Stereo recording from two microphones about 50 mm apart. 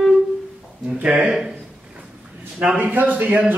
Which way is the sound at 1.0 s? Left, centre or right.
Centre.